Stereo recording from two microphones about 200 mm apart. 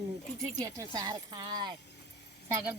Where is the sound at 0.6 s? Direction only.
15° right (ahead or behind).